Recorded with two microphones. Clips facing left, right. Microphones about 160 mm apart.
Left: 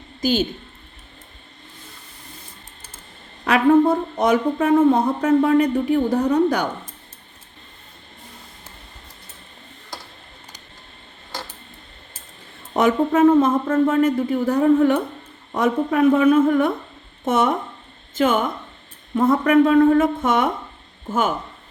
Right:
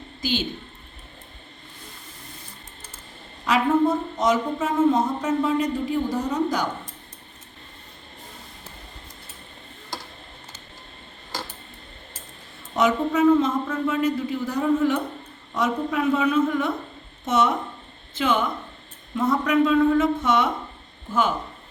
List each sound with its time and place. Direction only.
0.2 s a woman's voice: 45° left (ahead or behind)
3.4 s speech: 60° left (ahead or behind)
12.7 s speech: 50° left (ahead or behind)